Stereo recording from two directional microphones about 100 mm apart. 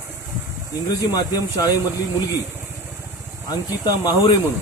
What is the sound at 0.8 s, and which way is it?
Speech, 40° left (ahead or behind).